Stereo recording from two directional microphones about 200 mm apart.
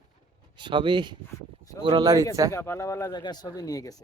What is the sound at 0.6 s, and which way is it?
Speech, 25° right (ahead or behind).